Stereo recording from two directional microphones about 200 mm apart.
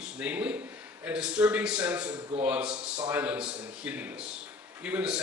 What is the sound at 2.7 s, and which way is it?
Speech, 20° right (ahead or behind).